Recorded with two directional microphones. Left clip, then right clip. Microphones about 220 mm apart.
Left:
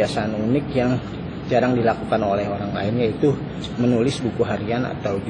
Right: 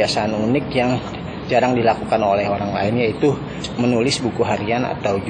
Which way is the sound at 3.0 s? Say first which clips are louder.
Right 2 dB; 5° left (ahead or behind).